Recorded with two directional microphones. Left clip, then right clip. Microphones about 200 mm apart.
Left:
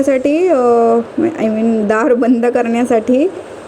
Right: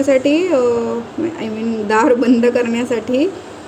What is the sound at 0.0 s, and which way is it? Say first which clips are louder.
A woman's voice: left 1 dB; 25° left (ahead or behind).